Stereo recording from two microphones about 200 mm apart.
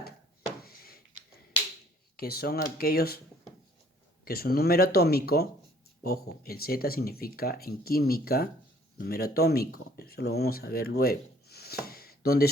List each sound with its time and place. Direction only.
0.6 s a sound: 50° left (ahead or behind)
2.1 s speech: 50° left (ahead or behind)
4.3 s speech: 50° left (ahead or behind)